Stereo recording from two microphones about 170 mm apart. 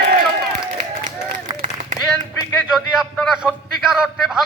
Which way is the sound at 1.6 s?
50° right (ahead or behind).